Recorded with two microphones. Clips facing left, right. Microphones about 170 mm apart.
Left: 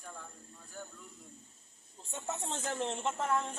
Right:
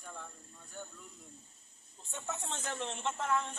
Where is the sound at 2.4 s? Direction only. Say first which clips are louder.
Left 6 dB; 35° left (ahead or behind).